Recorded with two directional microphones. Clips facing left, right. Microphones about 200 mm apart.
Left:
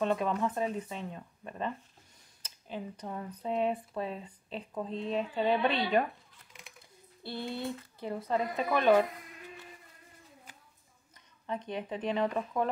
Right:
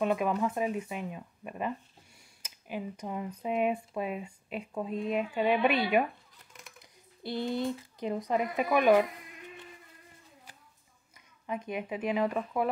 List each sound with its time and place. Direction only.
0.0 s speech: 10° right (ahead or behind)
7.2 s speech: 15° right (ahead or behind)
11.4 s speech: 10° right (ahead or behind)